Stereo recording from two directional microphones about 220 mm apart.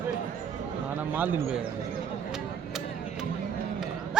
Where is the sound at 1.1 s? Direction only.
10° right (ahead or behind).